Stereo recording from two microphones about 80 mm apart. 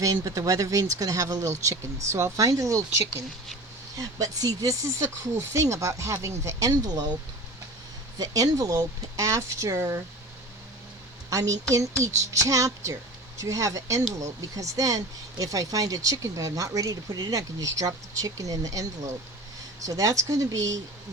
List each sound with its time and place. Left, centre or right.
0.0 s speech: right
8.2 s speech: right
11.3 s speech: right